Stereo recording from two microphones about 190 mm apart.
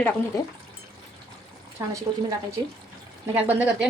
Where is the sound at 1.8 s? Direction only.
15° right (ahead or behind).